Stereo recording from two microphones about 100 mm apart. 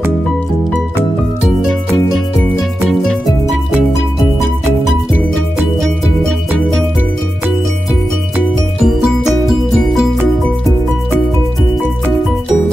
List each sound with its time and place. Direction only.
2.9 s music: 5° left (ahead or behind)
8.8 s music: 5° right (ahead or behind)